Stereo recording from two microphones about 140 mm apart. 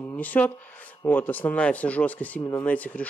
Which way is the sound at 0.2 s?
10° left (ahead or behind).